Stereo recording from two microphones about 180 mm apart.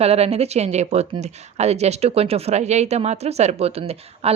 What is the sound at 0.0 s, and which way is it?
Speech, 35° right (ahead or behind).